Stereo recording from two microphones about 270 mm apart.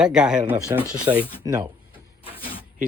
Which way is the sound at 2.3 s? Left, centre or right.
Centre.